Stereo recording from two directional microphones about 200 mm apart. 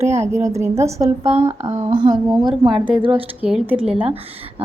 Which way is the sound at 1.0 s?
30° right (ahead or behind).